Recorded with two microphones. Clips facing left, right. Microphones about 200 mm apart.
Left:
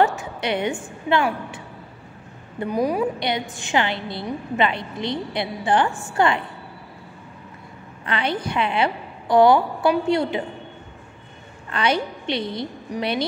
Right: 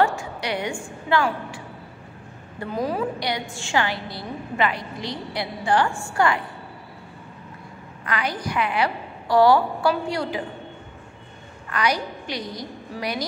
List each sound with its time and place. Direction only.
0.0 s a woman's voice: 20° left (ahead or behind)
2.6 s a woman's voice: 15° left (ahead or behind)
8.0 s a woman's voice: 25° left (ahead or behind)
11.7 s a woman's voice: 25° left (ahead or behind)